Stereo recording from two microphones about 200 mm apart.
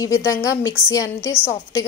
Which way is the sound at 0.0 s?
15° left (ahead or behind).